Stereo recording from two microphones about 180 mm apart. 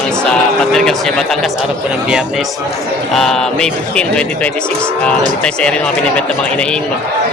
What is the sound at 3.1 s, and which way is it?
Speech, centre (ahead or behind).